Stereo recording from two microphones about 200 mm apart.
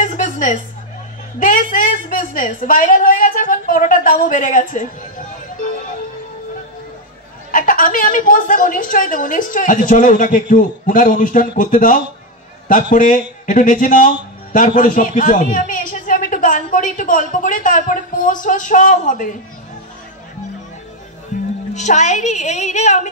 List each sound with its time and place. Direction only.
0.0 s a sound: 40° left (ahead or behind)
1.4 s a man's voice: 40° left (ahead or behind)
7.5 s a woman's voice: 45° left (ahead or behind)
21.3 s music: 40° left (ahead or behind)
21.7 s a man's voice: 35° left (ahead or behind)